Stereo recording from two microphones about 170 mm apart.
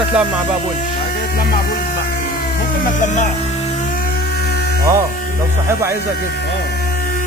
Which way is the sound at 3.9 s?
70° left (ahead or behind).